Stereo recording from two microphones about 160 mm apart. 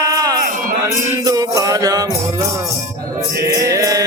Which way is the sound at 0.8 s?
20° right (ahead or behind).